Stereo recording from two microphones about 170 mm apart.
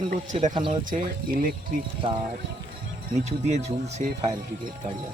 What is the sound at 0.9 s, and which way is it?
Speech, 55° right (ahead or behind).